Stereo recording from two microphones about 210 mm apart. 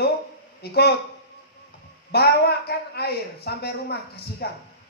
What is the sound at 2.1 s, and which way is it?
A man's voice, 50° left (ahead or behind).